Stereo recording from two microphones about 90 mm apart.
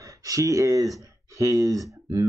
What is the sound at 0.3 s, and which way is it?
Speech, 40° right (ahead or behind).